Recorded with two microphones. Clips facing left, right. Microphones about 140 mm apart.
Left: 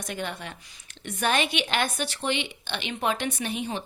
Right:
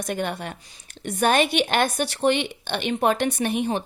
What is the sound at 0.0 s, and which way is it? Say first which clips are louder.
Speech: right 6 dB; 50° right (ahead or behind).